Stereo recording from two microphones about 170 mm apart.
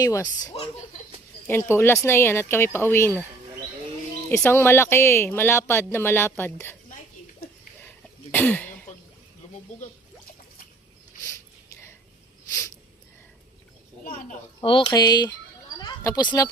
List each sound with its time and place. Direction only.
0.0 s speech: 20° left (ahead or behind)
4.3 s speech: 15° left (ahead or behind)
7.9 s cough: 10° left (ahead or behind)
14.0 s a sound: 50° left (ahead or behind)
14.6 s speech: 30° left (ahead or behind)
15.8 s a sound: 25° left (ahead or behind)